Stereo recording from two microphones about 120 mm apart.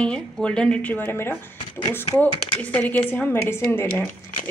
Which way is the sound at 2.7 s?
15° left (ahead or behind).